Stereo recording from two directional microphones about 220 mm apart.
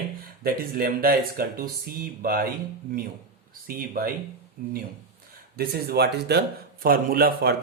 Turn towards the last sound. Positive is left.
turn(degrees=-45)  # may be behind; listen again after turning